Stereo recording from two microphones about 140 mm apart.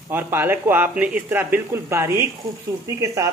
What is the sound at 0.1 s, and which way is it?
A woman's voice, 15° right (ahead or behind).